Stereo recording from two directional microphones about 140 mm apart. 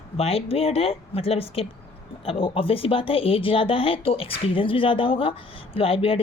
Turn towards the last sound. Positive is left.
turn(degrees=40)  # may be behind; listen again after turning